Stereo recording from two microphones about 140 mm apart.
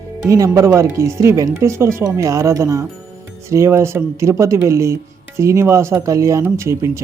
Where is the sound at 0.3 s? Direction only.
20° right (ahead or behind).